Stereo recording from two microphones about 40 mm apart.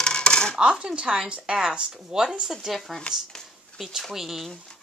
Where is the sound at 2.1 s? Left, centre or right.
Centre.